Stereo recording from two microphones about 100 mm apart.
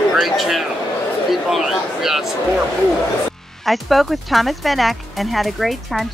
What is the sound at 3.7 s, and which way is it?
Speech, centre (ahead or behind).